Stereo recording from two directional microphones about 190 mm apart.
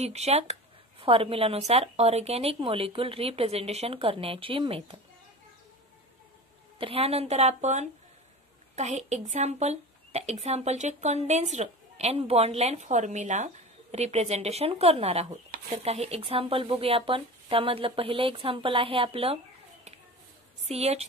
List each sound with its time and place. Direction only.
0.0 s speech: 35° right (ahead or behind)
6.8 s speech: 30° right (ahead or behind)